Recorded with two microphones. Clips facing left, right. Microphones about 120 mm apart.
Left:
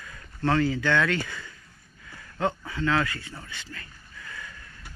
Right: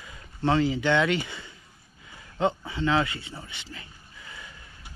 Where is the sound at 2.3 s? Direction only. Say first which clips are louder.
Right 2 dB; 20° right (ahead or behind).